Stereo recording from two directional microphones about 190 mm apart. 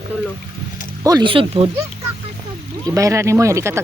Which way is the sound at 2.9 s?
15° right (ahead or behind).